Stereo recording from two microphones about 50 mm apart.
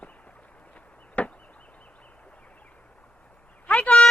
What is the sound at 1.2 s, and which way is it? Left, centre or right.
Chop, left.